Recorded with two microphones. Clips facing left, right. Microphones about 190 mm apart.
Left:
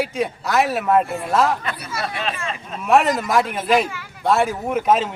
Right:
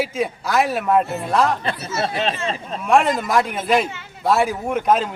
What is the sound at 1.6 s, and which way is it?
Speech, 30° right (ahead or behind).